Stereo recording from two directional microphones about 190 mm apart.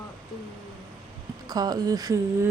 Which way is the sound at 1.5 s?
20° right (ahead or behind).